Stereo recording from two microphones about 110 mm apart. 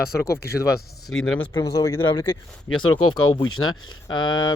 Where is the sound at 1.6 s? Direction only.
30° left (ahead or behind).